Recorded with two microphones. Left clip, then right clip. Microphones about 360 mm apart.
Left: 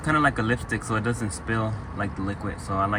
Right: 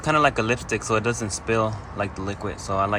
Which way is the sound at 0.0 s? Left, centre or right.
Centre.